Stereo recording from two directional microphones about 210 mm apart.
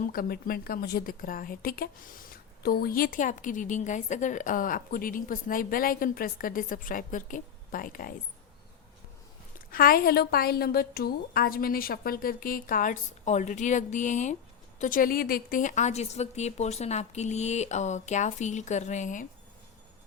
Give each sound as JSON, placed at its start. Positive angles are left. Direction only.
{"t": 0.0, "sound": "a woman's voice", "side_deg": 45}
{"t": 9.7, "sound": "a woman's voice", "side_deg": 45}